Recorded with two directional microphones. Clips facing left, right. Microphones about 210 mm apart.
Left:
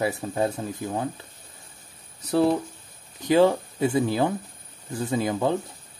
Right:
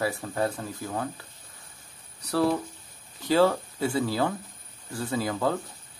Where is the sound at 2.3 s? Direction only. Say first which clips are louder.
Left 4 dB; 20° left (ahead or behind).